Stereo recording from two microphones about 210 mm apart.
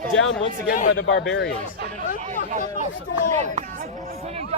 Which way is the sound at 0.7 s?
40° left (ahead or behind).